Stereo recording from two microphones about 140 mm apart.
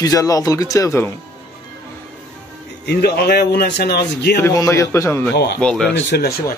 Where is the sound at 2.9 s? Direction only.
90° left.